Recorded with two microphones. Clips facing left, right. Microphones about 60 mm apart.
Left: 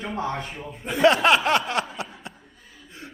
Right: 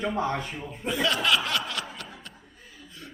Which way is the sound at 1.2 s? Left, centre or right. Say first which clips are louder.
Left 7 dB; left.